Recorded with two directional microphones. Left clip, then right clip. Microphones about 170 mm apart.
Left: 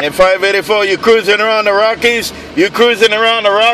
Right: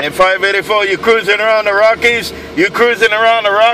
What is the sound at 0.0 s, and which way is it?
A man's voice, 25° left (ahead or behind).